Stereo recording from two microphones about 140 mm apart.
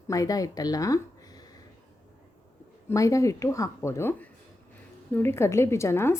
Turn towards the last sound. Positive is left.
turn(degrees=20)  # may be behind; listen again after turning